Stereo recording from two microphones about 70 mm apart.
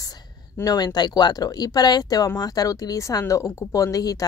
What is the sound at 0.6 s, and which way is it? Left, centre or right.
Speech, left.